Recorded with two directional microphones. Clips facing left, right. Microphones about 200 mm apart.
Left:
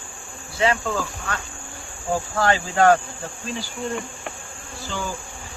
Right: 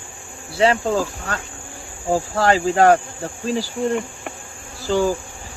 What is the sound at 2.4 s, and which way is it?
Speech, 25° right (ahead or behind).